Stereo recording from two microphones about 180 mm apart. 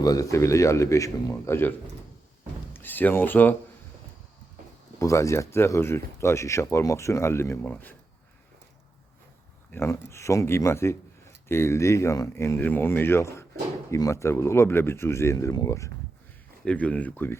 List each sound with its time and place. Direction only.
0.0 s speech: 20° left (ahead or behind)
2.7 s speech: 10° left (ahead or behind)
4.9 s speech: 15° left (ahead or behind)
9.7 s speech: 15° left (ahead or behind)